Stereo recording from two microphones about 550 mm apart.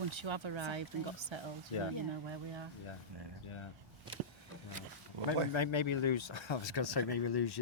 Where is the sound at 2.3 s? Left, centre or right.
Right.